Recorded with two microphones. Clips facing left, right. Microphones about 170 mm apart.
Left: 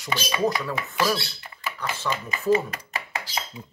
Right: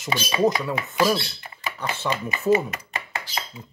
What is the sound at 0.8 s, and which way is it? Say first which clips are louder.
Speech: right 4 dB; 20° right (ahead or behind).